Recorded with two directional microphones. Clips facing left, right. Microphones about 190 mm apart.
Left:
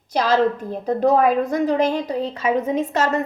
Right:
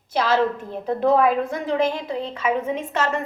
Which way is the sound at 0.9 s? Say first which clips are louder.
Left 1 dB; 40° left (ahead or behind).